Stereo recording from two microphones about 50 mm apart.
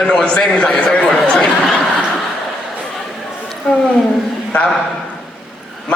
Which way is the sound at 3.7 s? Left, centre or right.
Centre.